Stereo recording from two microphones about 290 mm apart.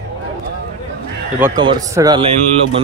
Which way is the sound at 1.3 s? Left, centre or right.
Centre.